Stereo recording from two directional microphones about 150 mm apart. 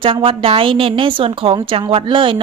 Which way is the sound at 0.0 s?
35° right (ahead or behind).